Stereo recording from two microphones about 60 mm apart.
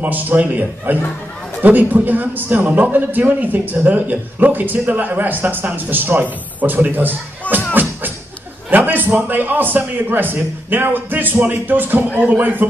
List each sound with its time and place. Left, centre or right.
0.0 s a man's voice: right
7.7 s music: right
8.6 s a man's voice: right